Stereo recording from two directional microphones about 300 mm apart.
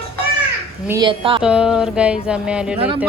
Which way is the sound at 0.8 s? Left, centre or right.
Centre.